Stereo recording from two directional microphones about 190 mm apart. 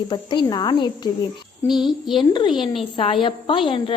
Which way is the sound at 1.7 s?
Centre (ahead or behind).